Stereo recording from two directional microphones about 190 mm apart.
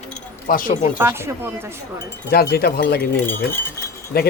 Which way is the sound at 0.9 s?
10° right (ahead or behind).